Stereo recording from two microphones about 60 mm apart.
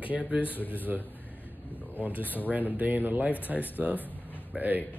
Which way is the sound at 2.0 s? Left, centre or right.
Right.